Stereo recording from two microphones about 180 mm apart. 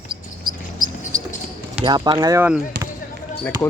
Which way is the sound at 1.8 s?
25° right (ahead or behind).